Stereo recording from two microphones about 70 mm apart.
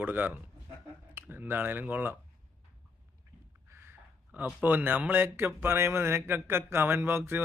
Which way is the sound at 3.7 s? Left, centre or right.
Right.